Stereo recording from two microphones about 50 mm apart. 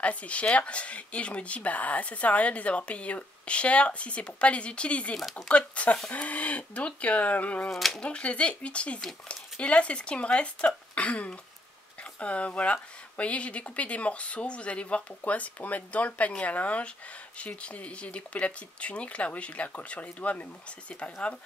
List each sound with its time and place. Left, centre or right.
0.0 s speech: left
7.7 s speech: centre
8.0 s speech: left